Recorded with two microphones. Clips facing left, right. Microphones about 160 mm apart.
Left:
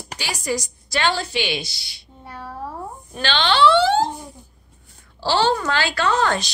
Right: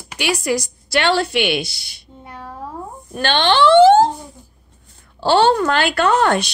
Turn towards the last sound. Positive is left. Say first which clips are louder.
# right 5 dB
turn(degrees=-60)  # may be behind; listen again after turning